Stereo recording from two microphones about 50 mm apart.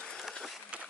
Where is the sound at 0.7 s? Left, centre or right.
Right.